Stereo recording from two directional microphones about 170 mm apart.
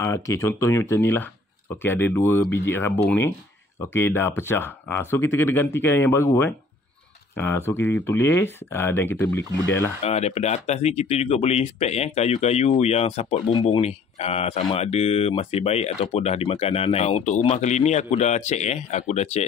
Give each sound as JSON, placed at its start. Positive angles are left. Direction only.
{"t": 0.0, "sound": "speech", "side_deg": 15}
{"t": 10.0, "sound": "speech", "side_deg": 40}